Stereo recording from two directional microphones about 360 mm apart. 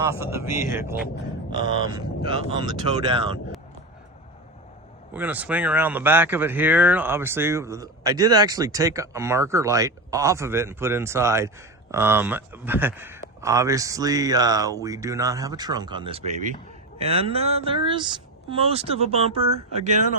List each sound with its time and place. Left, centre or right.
0.0 s speech: centre
5.1 s speech: centre